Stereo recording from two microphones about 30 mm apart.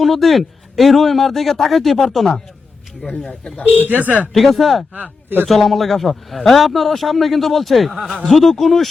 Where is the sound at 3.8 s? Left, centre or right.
Right.